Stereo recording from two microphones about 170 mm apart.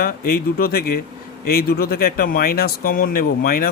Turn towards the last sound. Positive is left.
turn(degrees=60)  # may be behind; listen again after turning